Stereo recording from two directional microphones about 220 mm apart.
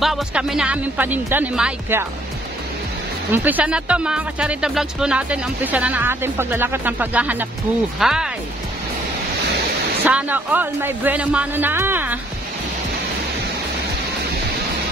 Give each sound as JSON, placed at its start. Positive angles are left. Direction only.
{"t": 0.0, "sound": "speech", "side_deg": 0}
{"t": 3.3, "sound": "speech", "side_deg": -10}
{"t": 10.0, "sound": "speech", "side_deg": -5}